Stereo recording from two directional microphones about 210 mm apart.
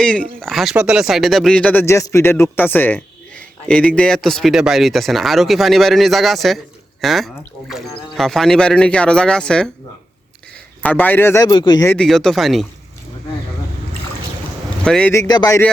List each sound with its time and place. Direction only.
0.0 s speech: 5° left (ahead or behind)
10.8 s a man's voice: 10° left (ahead or behind)
11.9 s speech: centre (ahead or behind)
14.8 s a man's voice: 5° left (ahead or behind)